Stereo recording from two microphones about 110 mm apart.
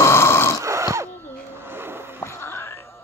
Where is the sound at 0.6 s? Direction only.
25° right (ahead or behind).